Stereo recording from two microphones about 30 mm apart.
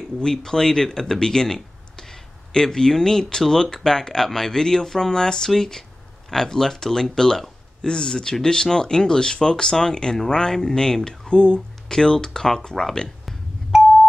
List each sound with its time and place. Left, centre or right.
0.2 s speech: centre
11.2 s speech: left
13.7 s a sound: centre